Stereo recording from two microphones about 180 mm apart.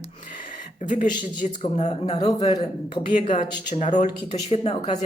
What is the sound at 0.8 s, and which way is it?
A man's voice, 45° left (ahead or behind).